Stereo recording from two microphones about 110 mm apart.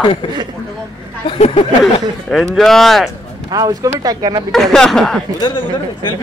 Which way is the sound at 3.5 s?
35° right (ahead or behind).